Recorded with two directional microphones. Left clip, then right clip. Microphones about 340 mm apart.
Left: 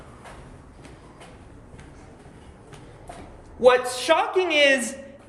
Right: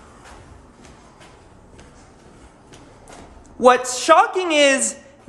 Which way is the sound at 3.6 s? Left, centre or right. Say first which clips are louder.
Right 3 dB; right.